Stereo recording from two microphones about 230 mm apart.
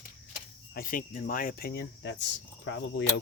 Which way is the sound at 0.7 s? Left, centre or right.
Left.